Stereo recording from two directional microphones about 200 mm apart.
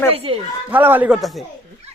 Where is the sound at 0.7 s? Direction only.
10° right (ahead or behind).